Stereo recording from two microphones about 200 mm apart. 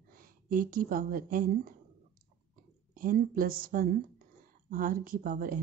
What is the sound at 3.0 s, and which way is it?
A woman's voice, 45° right (ahead or behind).